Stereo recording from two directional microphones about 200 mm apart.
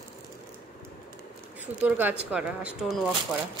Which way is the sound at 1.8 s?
10° right (ahead or behind).